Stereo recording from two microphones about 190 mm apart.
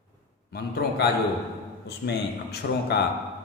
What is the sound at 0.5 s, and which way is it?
A man's voice, 60° left (ahead or behind).